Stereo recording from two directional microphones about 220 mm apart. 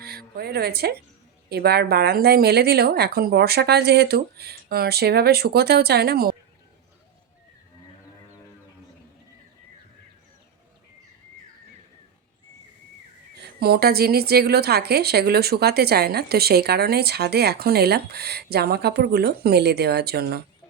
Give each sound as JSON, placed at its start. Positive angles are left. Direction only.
{"t": 0.3, "sound": "a woman's voice", "side_deg": -45}
{"t": 13.6, "sound": "a woman's voice", "side_deg": -45}